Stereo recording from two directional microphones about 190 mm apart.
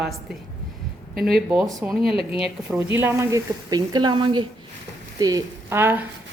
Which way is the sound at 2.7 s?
10° right (ahead or behind).